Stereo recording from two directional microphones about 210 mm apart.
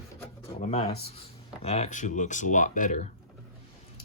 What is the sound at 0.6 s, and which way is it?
Speech, 30° left (ahead or behind).